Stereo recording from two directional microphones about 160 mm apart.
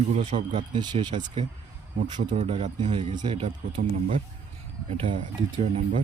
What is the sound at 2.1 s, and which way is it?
Speech, 45° right (ahead or behind).